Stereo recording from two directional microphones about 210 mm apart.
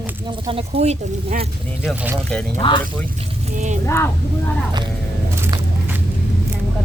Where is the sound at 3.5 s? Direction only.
35° right (ahead or behind).